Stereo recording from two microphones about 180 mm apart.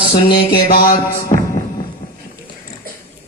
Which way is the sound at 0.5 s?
50° left (ahead or behind).